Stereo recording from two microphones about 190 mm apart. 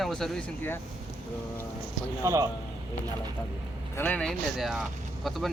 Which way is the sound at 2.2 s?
15° right (ahead or behind).